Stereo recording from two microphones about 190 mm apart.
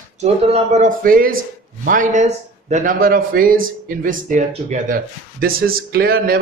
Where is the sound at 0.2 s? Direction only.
35° right (ahead or behind).